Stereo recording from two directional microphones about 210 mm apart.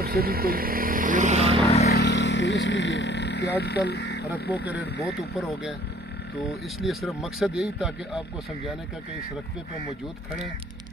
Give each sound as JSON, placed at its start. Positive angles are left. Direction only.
{"t": 0.0, "sound": "vehicle", "side_deg": -45}
{"t": 1.9, "sound": "speech", "side_deg": 55}
{"t": 5.4, "sound": "speech", "side_deg": 0}
{"t": 6.8, "sound": "speech", "side_deg": 0}